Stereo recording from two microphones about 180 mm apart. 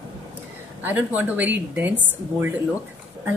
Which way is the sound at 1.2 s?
10° right (ahead or behind).